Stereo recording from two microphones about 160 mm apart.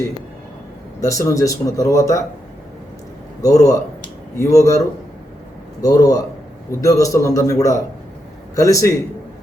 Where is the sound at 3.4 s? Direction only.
20° left (ahead or behind).